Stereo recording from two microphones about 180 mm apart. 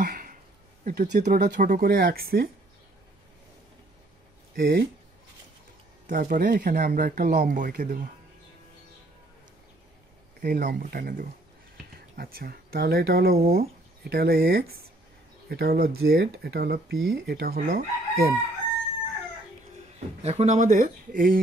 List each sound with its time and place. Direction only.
0.0 s a sound: 50° right (ahead or behind)
0.8 s speech: 60° right (ahead or behind)
1.1 s speech: 45° right (ahead or behind); by 2.5 s 60° right (ahead or behind)
4.6 s speech: 55° right (ahead or behind)
6.0 s speech: 50° right (ahead or behind)
10.4 s speech: 55° right (ahead or behind)
20.2 s speech: 35° right (ahead or behind); by 21.4 s 50° right (ahead or behind)